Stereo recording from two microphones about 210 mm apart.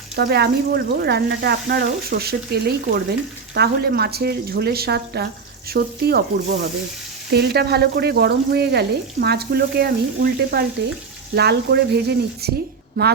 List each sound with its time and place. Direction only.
0.2 s frying: 50° right (ahead or behind)